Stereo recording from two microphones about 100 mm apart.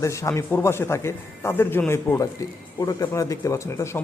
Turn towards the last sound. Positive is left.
turn(degrees=30)  # may be behind; listen again after turning